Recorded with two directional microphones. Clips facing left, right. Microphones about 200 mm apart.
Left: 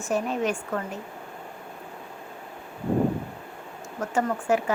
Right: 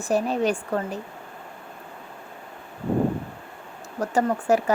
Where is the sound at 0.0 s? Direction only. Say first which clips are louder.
Right 3 dB; 35° right (ahead or behind).